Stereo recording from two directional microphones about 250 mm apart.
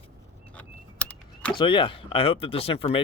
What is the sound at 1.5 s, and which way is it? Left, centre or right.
Speech, centre.